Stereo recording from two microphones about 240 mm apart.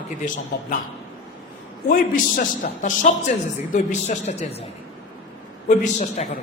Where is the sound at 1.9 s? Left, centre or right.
Left.